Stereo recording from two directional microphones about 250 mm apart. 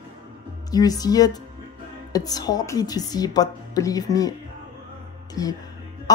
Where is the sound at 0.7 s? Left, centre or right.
Centre.